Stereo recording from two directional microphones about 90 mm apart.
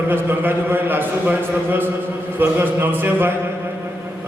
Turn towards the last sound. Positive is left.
turn(degrees=-25)  # may be behind; listen again after turning